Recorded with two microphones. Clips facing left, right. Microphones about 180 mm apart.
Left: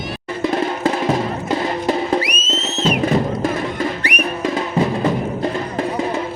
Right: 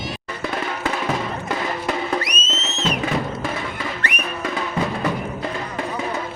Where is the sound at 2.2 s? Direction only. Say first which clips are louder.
Left 4 dB; 10° left (ahead or behind).